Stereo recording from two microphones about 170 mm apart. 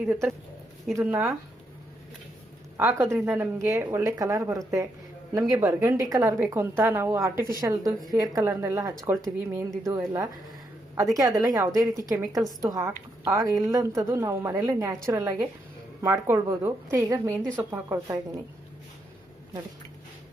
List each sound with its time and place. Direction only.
0.0 s speech: 10° right (ahead or behind)
2.7 s a woman's voice: 15° right (ahead or behind)
17.3 s speech: 10° left (ahead or behind)
17.6 s speech: 15° right (ahead or behind)